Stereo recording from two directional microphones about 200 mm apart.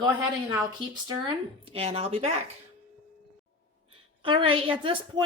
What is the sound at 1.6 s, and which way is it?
Speech, 30° right (ahead or behind).